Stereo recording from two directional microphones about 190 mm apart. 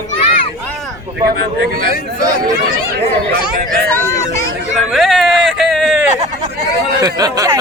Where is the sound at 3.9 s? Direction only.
15° left (ahead or behind).